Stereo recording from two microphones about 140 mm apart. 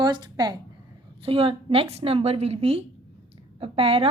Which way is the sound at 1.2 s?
40° right (ahead or behind).